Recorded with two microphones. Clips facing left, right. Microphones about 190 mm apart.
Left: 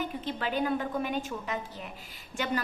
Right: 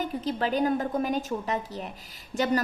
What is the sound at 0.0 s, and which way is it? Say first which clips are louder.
A woman's voice: right 5 dB; 40° right (ahead or behind).